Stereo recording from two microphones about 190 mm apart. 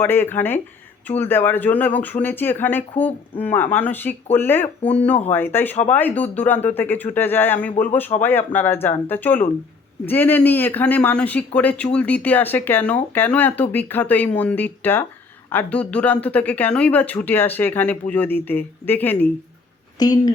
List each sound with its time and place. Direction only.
0.0 s speech: 10° left (ahead or behind)